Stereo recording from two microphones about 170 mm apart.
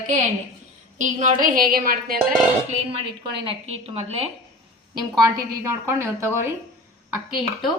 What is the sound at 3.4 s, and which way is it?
Speech, 35° right (ahead or behind).